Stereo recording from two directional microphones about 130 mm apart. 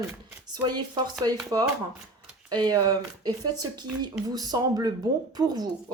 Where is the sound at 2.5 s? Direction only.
30° right (ahead or behind).